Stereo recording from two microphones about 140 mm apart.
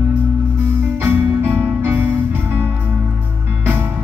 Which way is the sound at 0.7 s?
15° right (ahead or behind).